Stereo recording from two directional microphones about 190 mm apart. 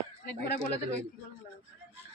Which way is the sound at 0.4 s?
55° left (ahead or behind).